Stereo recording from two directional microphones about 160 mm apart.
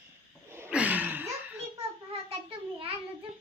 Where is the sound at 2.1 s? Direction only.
35° right (ahead or behind).